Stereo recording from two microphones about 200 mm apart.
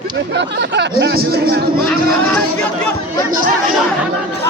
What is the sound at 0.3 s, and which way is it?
Speech, 60° right (ahead or behind).